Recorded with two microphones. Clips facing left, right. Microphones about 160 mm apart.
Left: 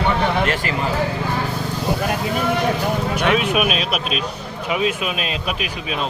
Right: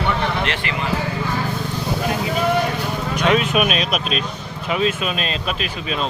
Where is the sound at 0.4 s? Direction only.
40° left (ahead or behind).